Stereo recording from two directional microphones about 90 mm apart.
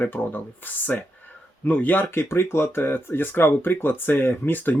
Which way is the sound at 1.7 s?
20° left (ahead or behind).